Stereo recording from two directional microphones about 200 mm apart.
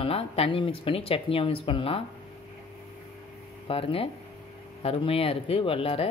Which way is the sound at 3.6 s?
25° left (ahead or behind).